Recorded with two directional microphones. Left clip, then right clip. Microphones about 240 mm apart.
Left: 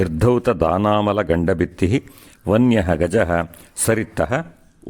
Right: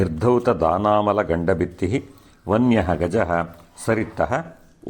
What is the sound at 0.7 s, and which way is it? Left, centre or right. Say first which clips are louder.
Speech: even; left.